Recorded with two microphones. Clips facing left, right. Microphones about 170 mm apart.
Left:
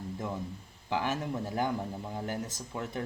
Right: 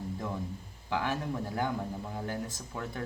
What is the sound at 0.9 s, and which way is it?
Speech, 15° left (ahead or behind).